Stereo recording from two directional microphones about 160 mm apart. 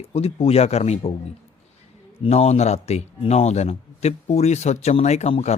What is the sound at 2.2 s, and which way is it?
Speech, 40° left (ahead or behind).